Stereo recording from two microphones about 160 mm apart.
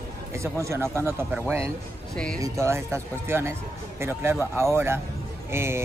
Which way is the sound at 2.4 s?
15° right (ahead or behind).